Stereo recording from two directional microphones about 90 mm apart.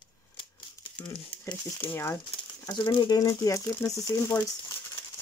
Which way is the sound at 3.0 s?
45° left (ahead or behind).